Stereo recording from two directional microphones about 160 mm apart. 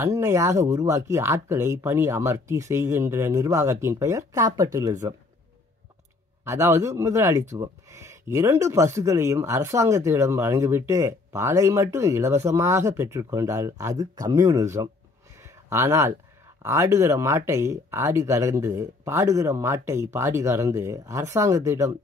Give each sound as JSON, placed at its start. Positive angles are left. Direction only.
{"t": 0.0, "sound": "speech", "side_deg": -20}
{"t": 6.4, "sound": "speech", "side_deg": -15}
{"t": 15.4, "sound": "a sound", "side_deg": -15}
{"t": 16.6, "sound": "speech", "side_deg": -20}